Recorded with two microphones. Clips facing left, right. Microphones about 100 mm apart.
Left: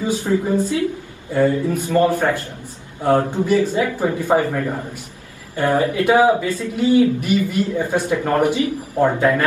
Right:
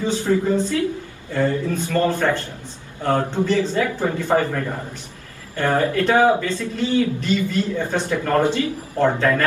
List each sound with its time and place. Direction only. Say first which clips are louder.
0.0 s a man's voice: even; 15° left (ahead or behind)